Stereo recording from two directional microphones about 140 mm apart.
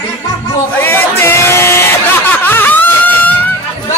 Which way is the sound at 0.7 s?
15° left (ahead or behind).